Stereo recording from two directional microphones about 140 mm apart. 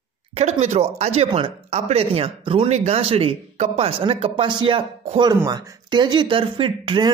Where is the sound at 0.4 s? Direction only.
50° right (ahead or behind).